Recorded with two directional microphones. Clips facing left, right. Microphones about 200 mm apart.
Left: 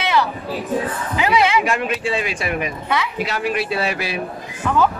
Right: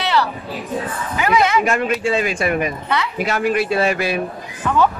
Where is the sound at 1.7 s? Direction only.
45° right (ahead or behind).